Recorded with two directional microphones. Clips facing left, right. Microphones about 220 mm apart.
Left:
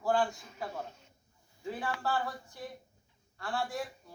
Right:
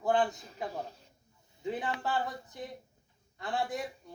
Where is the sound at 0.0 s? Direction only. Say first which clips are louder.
Right 1 dB; 20° right (ahead or behind).